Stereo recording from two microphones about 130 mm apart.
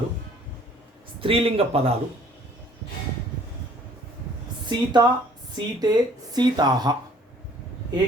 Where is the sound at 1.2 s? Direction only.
45° right (ahead or behind).